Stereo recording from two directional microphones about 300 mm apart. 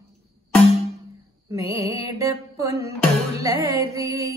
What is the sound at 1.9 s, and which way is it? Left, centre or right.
Mantra, centre.